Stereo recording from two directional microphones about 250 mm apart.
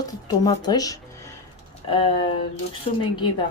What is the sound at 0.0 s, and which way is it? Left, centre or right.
Speech, centre.